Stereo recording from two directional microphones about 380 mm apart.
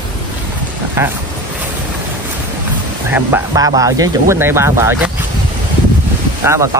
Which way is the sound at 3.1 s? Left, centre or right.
Centre.